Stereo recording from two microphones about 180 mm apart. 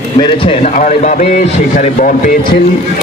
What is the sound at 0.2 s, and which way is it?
A man's voice, 30° left (ahead or behind).